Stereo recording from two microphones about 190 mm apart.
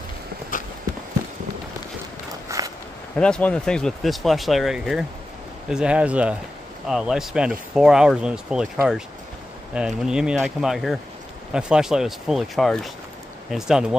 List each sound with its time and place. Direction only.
2.4 s walk: 20° right (ahead or behind)
3.2 s speech: 5° left (ahead or behind)
9.8 s speech: 5° right (ahead or behind)